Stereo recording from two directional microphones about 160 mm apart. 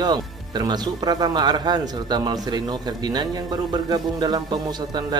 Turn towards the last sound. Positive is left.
turn(degrees=-25)  # may be behind; listen again after turning